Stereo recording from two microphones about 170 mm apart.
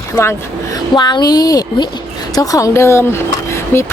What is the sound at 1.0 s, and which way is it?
Speech, 25° left (ahead or behind).